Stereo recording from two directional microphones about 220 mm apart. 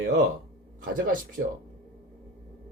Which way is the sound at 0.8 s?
35° right (ahead or behind).